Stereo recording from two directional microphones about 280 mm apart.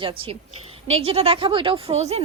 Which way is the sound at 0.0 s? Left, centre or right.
Centre.